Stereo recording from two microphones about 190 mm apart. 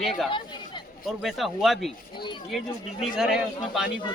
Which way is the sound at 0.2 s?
Centre (ahead or behind).